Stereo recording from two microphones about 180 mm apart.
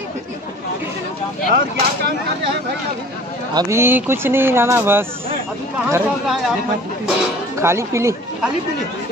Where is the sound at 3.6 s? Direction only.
15° right (ahead or behind).